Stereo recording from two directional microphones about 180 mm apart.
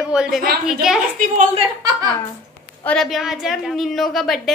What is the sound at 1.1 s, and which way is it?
Speech, 45° right (ahead or behind).